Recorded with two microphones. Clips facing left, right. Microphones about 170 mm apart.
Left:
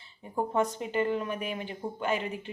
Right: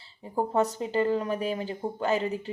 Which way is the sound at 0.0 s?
30° right (ahead or behind).